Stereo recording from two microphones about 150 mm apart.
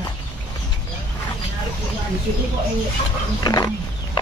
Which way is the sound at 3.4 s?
25° left (ahead or behind).